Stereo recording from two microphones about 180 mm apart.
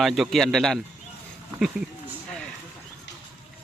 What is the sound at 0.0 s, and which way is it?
Speech, centre (ahead or behind).